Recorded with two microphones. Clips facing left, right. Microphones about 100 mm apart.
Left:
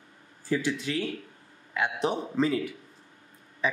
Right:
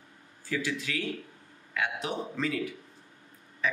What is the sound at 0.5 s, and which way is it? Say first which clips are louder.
Speech: left 4 dB; 30° left (ahead or behind).